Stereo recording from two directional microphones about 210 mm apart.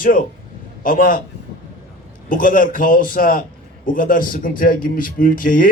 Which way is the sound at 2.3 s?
40° left (ahead or behind).